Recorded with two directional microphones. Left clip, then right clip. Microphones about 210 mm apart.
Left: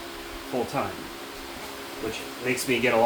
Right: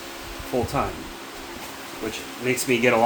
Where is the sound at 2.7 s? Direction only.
40° right (ahead or behind).